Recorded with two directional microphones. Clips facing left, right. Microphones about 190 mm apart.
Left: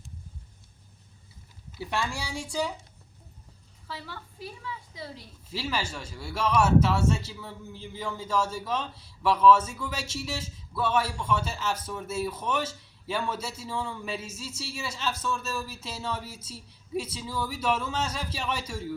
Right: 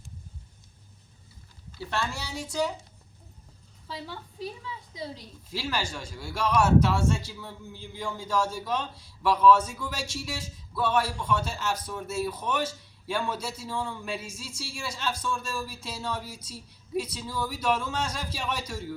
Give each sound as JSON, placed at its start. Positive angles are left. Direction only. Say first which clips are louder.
{"t": 1.7, "sound": "speech", "louder": "even", "side_deg": 15}
{"t": 3.9, "sound": "a woman's voice", "louder": "right 3 dB", "side_deg": -20}
{"t": 5.5, "sound": "speech", "louder": "even", "side_deg": 5}